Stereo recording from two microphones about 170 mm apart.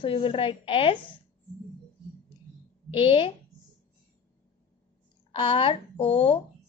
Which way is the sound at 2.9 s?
35° left (ahead or behind).